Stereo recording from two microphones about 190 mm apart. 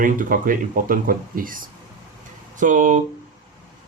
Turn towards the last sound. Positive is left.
turn(degrees=-40)  # may be behind; listen again after turning